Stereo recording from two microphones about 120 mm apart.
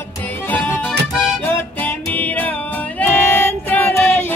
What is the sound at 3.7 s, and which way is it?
Child singing, 15° left (ahead or behind).